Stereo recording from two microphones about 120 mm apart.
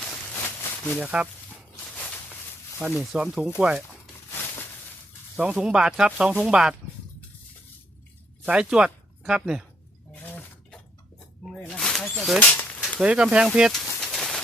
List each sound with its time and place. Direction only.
0.9 s speech: 10° right (ahead or behind)
1.8 s a sound: 15° left (ahead or behind)
2.8 s speech: 5° right (ahead or behind)
3.6 s a sound: 10° right (ahead or behind)
4.4 s a sound: 20° left (ahead or behind)
5.4 s speech: 10° right (ahead or behind)
8.4 s speech: 5° right (ahead or behind)
10.2 s livestock: 10° left (ahead or behind)
11.6 s mouse: 5° left (ahead or behind)
12.4 s a sound: 15° left (ahead or behind)
13.0 s speech: 10° right (ahead or behind)
14.0 s bird: 5° left (ahead or behind)